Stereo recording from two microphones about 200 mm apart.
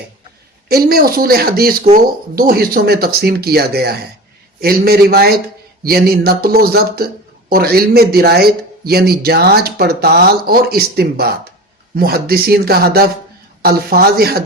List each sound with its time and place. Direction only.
0.7 s speech: 50° right (ahead or behind)